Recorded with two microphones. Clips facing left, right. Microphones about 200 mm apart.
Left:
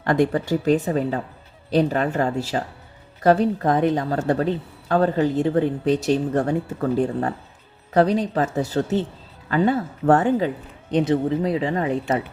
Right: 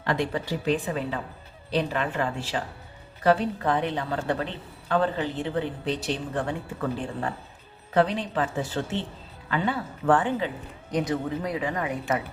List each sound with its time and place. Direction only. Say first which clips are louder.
0.0 s a woman's voice: left 7 dB; 50° left (ahead or behind)
10.9 s a woman's voice: left 7 dB; 25° left (ahead or behind)